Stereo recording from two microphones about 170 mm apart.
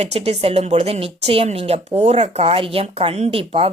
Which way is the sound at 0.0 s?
40° right (ahead or behind).